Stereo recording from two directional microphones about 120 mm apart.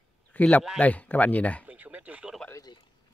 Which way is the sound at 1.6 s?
10° right (ahead or behind).